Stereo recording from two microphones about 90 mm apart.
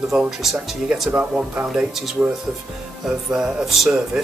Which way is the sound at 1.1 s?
15° right (ahead or behind).